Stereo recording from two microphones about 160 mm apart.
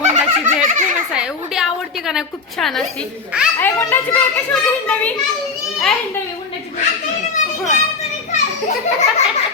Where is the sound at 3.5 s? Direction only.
10° left (ahead or behind).